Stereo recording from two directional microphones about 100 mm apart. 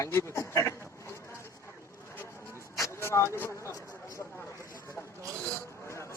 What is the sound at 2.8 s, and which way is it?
Vehicle, 30° left (ahead or behind).